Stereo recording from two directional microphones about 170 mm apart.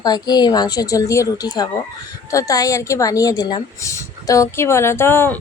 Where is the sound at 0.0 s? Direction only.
25° left (ahead or behind).